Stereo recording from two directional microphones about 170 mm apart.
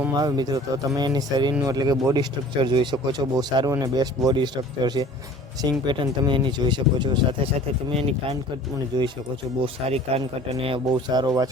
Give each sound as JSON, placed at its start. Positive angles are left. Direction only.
{"t": 0.2, "sound": "speech", "side_deg": -20}
{"t": 8.9, "sound": "speech", "side_deg": -25}
{"t": 9.9, "sound": "speech", "side_deg": -35}